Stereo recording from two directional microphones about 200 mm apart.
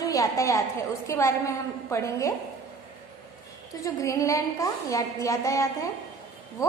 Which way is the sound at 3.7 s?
15° left (ahead or behind).